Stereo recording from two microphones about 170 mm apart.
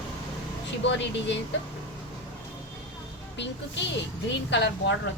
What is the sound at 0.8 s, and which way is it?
Speech, 90° left.